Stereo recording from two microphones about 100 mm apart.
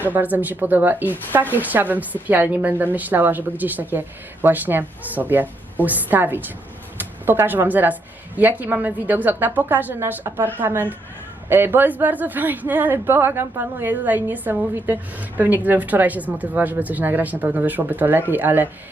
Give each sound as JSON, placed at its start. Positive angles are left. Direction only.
{"t": 0.0, "sound": "a woman's voice", "side_deg": -15}